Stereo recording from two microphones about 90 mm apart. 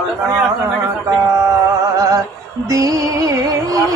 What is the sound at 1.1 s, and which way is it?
Female singing, 35° right (ahead or behind).